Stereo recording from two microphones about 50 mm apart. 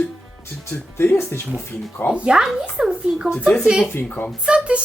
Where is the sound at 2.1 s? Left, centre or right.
Right.